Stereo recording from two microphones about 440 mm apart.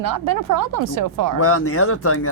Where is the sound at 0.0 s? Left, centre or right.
Right.